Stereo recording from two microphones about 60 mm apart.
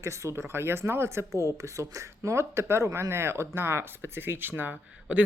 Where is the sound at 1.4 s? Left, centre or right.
Right.